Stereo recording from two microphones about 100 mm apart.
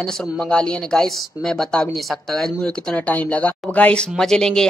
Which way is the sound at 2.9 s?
15° left (ahead or behind).